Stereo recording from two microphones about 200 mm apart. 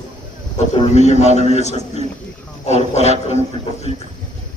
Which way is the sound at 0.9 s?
35° left (ahead or behind).